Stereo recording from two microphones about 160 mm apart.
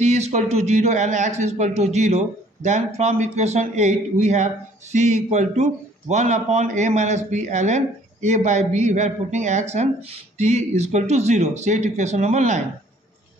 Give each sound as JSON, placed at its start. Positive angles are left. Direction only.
{"t": 0.0, "sound": "speech", "side_deg": -45}